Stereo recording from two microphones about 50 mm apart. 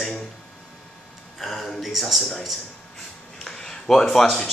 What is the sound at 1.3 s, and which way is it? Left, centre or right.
A man's voice, centre.